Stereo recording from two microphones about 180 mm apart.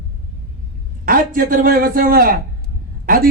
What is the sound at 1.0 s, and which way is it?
Speech, 50° right (ahead or behind).